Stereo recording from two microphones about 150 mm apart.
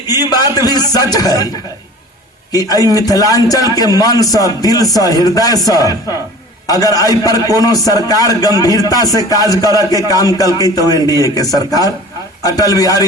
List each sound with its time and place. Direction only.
0.3 s a man's voice: 25° left (ahead or behind)
2.5 s a man's voice: 25° left (ahead or behind)